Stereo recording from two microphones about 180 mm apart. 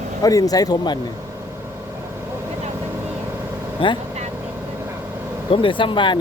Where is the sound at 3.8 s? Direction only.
30° left (ahead or behind).